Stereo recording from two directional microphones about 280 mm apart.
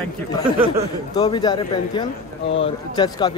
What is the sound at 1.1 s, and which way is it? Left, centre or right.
A man's voice, centre.